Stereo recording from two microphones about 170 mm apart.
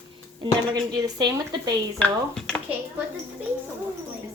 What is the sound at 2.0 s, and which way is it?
Speech, 5° left (ahead or behind).